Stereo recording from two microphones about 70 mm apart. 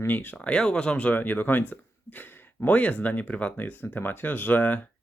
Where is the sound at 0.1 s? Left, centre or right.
Left.